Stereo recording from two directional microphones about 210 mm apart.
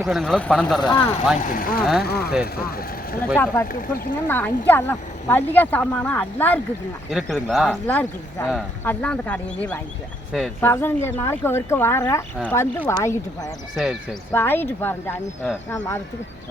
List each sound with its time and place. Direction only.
0.0 s speech: centre (ahead or behind)
0.8 s speech: 15° left (ahead or behind)
1.4 s speech: 40° left (ahead or behind)
1.8 s speech: centre (ahead or behind)
2.0 s speech: 50° left (ahead or behind)
3.3 s speech: 10° left (ahead or behind)
3.7 s speech: 40° left (ahead or behind)
4.3 s speech: 10° left (ahead or behind)
10.7 s speech: 10° left (ahead or behind)
13.7 s speech: centre (ahead or behind)
14.3 s speech: 10° left (ahead or behind)